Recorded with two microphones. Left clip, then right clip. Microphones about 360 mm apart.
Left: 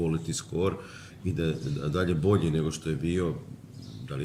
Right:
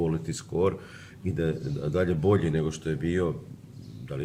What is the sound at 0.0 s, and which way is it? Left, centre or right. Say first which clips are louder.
Speech: right 1 dB; centre.